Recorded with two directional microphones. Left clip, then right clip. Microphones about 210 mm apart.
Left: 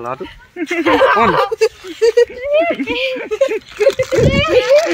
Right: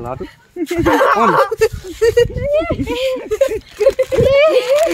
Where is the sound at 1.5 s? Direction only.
45° right (ahead or behind).